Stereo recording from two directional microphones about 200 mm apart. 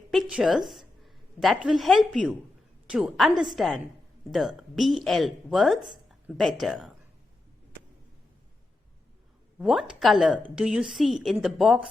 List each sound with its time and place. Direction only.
0.1 s a woman's voice: 5° right (ahead or behind)
9.6 s a woman's voice: centre (ahead or behind)